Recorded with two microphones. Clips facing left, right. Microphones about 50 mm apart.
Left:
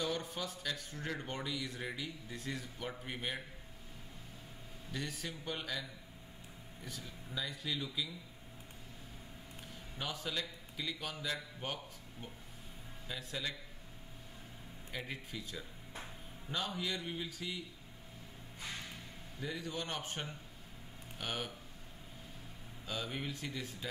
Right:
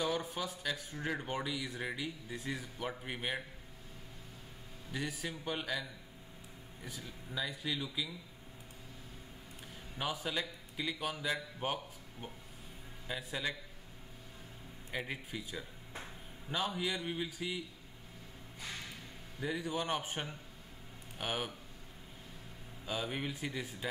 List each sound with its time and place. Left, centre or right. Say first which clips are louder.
0.0 s speech: right 3 dB; centre
4.9 s speech: right 3 dB; centre
9.9 s a man's voice: right 3 dB; centre
14.9 s speech: right 4 dB; centre
19.4 s speech: right 5 dB; centre
22.8 s speech: right 3 dB; centre